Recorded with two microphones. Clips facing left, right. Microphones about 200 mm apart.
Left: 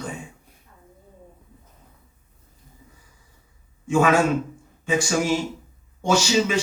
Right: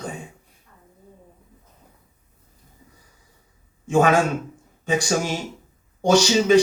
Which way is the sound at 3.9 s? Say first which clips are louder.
Right 1 dB; 35° right (ahead or behind).